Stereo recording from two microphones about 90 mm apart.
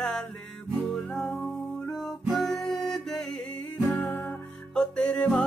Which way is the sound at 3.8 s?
25° left (ahead or behind).